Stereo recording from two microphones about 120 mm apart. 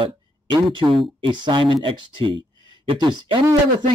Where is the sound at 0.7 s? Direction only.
45° right (ahead or behind).